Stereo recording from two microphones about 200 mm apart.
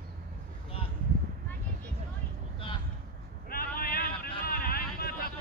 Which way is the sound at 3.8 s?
50° left (ahead or behind).